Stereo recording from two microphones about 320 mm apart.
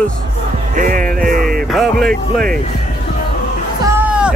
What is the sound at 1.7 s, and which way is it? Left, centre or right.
Music, centre.